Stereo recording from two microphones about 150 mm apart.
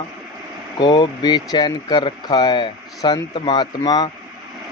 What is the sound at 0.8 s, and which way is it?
Speech, 30° left (ahead or behind).